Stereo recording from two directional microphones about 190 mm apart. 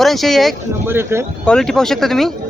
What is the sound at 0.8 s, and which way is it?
Speech, 15° right (ahead or behind).